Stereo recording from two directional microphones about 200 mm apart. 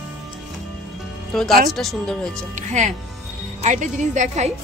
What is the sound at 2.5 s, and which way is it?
A woman's voice, 35° right (ahead or behind).